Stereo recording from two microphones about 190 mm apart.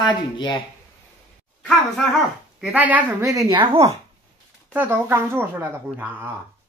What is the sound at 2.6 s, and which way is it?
Speech, 10° right (ahead or behind).